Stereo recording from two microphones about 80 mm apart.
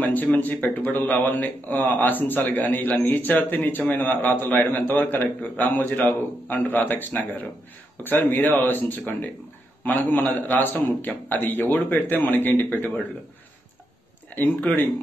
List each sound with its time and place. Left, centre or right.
0.0 s a man's voice: left
10.3 s a man's voice: left
14.3 s a man's voice: left